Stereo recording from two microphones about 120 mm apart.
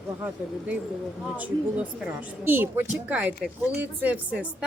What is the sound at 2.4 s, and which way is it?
A woman's voice, 15° right (ahead or behind).